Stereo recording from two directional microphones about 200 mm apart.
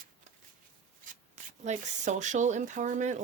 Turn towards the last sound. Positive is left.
turn(degrees=-40)  # may be behind; listen again after turning